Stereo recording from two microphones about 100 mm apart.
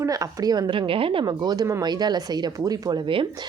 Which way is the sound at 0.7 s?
60° right (ahead or behind).